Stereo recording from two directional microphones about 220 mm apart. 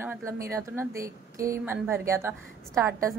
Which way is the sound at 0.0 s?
10° right (ahead or behind).